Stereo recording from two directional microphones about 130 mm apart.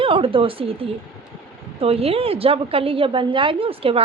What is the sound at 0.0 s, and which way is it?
A woman's voice, 40° right (ahead or behind).